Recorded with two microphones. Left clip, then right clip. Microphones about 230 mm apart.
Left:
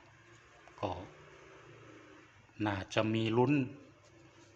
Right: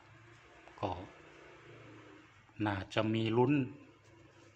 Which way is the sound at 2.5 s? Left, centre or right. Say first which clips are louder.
Left 1 dB; centre.